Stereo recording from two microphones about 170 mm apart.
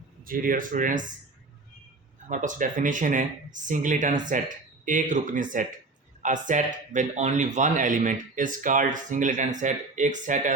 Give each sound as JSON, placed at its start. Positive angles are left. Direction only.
{"t": 0.3, "sound": "speech", "side_deg": -55}
{"t": 2.3, "sound": "speech", "side_deg": -50}